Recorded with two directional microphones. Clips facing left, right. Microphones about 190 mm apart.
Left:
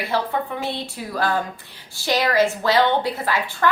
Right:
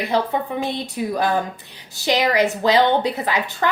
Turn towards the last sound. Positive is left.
turn(degrees=-20)  # may be behind; listen again after turning